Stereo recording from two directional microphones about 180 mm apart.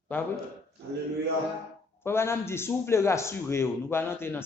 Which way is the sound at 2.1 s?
15° left (ahead or behind).